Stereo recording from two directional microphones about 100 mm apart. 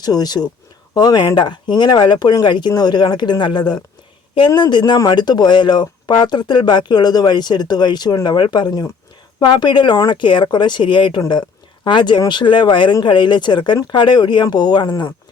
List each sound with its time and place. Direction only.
0.0 s speech: 40° left (ahead or behind)